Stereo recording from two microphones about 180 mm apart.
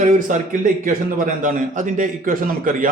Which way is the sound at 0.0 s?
45° right (ahead or behind).